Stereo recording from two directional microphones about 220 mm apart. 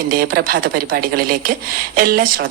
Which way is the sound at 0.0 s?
40° right (ahead or behind).